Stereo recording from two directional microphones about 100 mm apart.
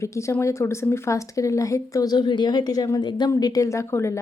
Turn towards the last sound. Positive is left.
turn(degrees=30)  # may be behind; listen again after turning